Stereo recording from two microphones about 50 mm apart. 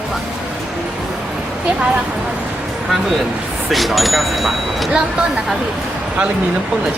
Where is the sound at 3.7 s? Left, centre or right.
Centre.